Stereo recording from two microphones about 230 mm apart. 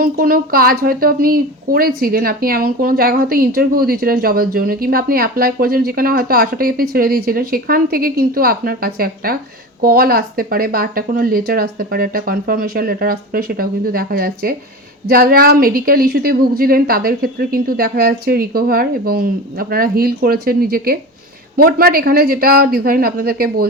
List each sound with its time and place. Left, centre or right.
0.0 s a woman's voice: right